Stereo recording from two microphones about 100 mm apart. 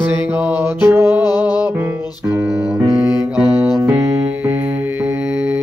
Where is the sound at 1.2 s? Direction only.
40° left (ahead or behind).